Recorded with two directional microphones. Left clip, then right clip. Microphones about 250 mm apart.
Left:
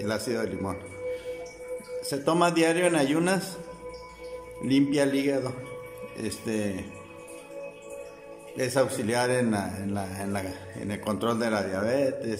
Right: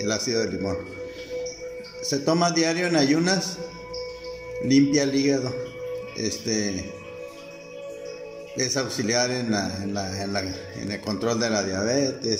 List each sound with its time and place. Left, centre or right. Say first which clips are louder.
0.0 s a man's voice: right 4 dB; centre
2.0 s a man's voice: right 2 dB; centre
4.6 s a man's voice: right 3 dB; centre
8.5 s a man's voice: left 1 dB; centre